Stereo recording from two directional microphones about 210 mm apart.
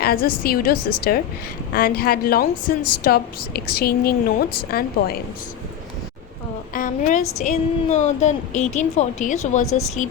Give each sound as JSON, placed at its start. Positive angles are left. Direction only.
{"t": 0.0, "sound": "a woman's voice", "side_deg": 45}
{"t": 6.7, "sound": "a woman's voice", "side_deg": 40}